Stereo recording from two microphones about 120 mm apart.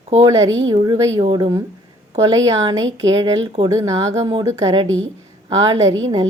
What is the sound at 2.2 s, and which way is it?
A woman's voice, 30° right (ahead or behind).